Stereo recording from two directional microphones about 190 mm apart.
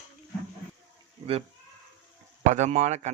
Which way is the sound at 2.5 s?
40° right (ahead or behind).